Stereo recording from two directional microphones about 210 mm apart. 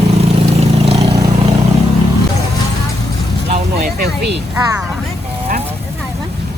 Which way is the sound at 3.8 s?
50° right (ahead or behind).